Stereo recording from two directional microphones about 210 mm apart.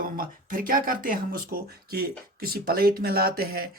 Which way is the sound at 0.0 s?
40° right (ahead or behind).